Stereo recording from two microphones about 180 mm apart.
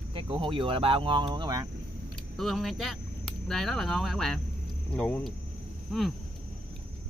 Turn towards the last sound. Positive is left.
turn(degrees=0)  # may be behind; listen again after turning